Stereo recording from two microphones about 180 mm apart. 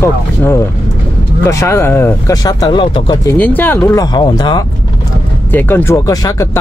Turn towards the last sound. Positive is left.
turn(degrees=20)  # may be behind; listen again after turning